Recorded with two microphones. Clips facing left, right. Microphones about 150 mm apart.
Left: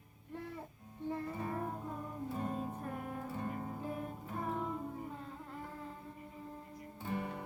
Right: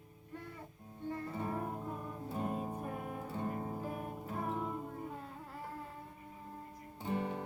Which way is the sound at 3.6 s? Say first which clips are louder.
Right 2 dB; 20° right (ahead or behind).